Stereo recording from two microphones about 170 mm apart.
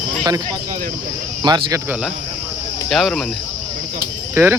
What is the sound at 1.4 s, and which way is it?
Speech, 25° right (ahead or behind).